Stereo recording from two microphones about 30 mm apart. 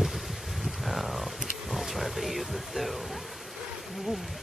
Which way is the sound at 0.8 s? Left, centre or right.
Centre.